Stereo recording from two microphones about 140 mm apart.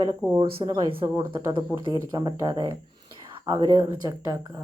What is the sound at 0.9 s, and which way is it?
A woman's voice, 40° right (ahead or behind).